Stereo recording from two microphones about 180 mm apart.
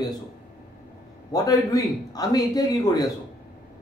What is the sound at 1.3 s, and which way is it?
A man's voice, 20° left (ahead or behind).